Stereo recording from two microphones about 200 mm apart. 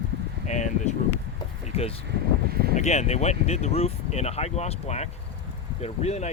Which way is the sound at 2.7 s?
35° left (ahead or behind).